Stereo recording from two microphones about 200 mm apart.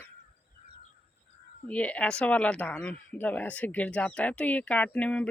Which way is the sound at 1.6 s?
5° left (ahead or behind).